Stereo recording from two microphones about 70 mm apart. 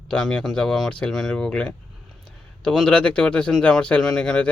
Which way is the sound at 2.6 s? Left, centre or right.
Centre.